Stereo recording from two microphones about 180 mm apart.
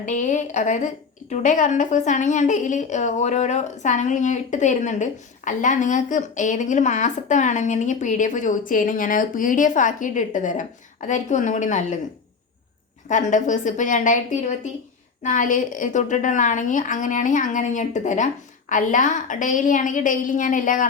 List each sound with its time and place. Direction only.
0.0 s a woman's voice: 45° left (ahead or behind)
13.1 s a woman's voice: 45° left (ahead or behind)